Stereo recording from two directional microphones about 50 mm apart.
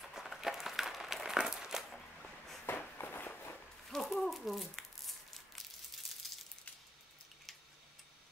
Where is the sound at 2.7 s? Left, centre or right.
Left.